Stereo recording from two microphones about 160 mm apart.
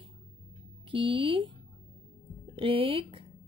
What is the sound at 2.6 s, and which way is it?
Speech, 35° right (ahead or behind).